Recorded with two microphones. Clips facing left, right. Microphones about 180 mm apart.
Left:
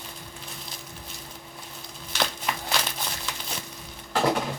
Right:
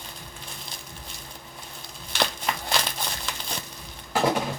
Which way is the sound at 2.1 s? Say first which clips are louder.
Right 2 dB; 5° left (ahead or behind).